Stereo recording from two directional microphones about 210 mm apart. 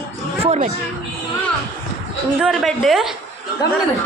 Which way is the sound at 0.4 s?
30° right (ahead or behind).